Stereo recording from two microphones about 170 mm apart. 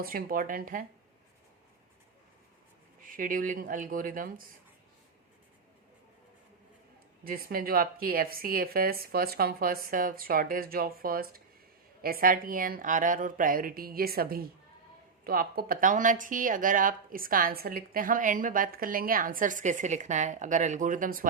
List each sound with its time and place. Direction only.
0.0 s speech: 60° right (ahead or behind)
3.0 s speech: 55° right (ahead or behind)
7.3 s speech: 60° right (ahead or behind)